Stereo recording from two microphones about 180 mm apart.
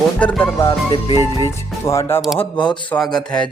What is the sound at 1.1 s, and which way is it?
Speech, 20° right (ahead or behind).